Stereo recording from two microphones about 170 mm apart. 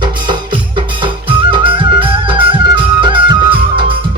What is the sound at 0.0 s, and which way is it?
Music, 30° right (ahead or behind).